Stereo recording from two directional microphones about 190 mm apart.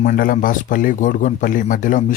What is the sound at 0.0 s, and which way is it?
A man's voice, 45° left (ahead or behind).